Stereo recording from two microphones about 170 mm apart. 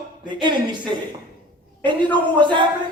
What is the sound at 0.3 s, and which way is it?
Speech, 25° right (ahead or behind).